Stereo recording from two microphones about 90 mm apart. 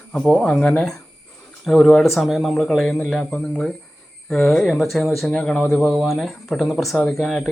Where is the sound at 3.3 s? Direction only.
15° left (ahead or behind).